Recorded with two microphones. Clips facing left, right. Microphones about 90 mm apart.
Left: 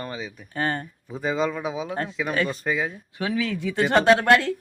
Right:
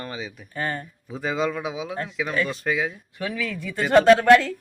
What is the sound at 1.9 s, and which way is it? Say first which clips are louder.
Speech: left 2 dB; 35° left (ahead or behind).